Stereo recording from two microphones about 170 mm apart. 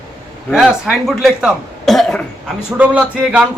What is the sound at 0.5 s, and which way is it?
A man's voice, centre (ahead or behind).